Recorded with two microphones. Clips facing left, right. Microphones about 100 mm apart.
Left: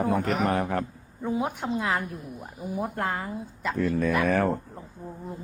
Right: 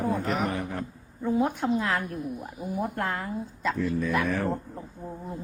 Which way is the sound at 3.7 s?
60° left (ahead or behind).